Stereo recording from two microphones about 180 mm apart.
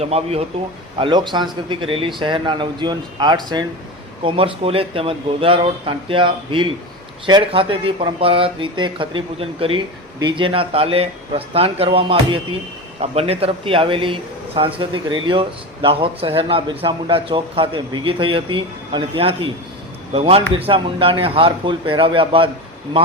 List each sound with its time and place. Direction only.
0.0 s a man's voice: 35° right (ahead or behind)